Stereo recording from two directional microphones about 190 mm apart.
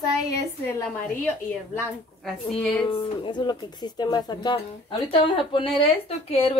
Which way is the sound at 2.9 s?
25° left (ahead or behind).